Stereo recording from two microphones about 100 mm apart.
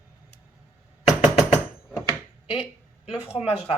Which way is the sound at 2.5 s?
80° left.